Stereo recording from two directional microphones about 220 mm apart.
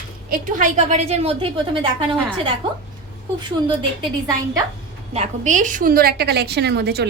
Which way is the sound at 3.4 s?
20° right (ahead or behind).